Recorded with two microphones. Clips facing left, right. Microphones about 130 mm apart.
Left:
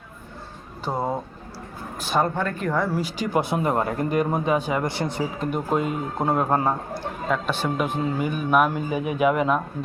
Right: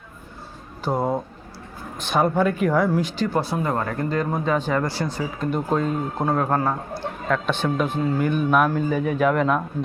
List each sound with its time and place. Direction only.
0.9 s speech: centre (ahead or behind)
2.2 s speech: 10° right (ahead or behind); by 5.5 s 25° left (ahead or behind)
5.5 s a man's voice: 10° left (ahead or behind)